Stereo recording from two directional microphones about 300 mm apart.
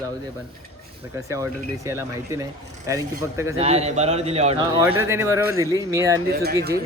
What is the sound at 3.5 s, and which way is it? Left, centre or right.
A man's voice, right.